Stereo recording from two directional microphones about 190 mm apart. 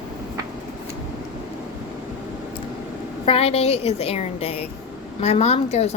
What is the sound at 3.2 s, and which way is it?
A woman's voice, 30° left (ahead or behind).